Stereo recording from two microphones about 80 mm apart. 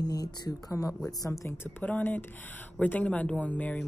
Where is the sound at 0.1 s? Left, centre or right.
Left.